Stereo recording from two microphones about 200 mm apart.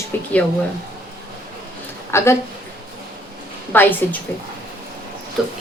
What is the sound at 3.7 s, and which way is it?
Speech, 10° left (ahead or behind).